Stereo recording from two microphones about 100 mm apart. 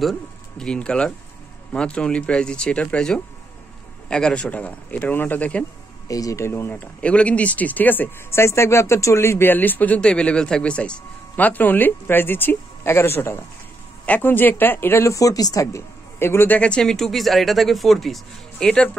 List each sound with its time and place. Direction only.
0.0 s speech: 5° left (ahead or behind)
6.0 s speech: 35° left (ahead or behind); by 18.9 s 5° left (ahead or behind)